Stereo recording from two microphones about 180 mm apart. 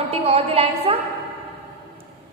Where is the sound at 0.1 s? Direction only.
35° right (ahead or behind).